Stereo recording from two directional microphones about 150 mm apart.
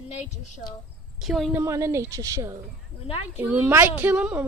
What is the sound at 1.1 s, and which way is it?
Speech, centre (ahead or behind).